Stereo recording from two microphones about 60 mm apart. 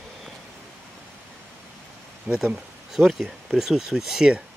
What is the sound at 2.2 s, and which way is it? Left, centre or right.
Speech, centre.